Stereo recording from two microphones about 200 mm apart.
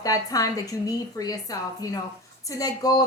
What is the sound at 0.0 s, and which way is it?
A woman's voice, 15° left (ahead or behind).